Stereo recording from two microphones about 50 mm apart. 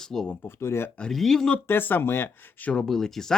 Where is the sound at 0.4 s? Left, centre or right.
Left.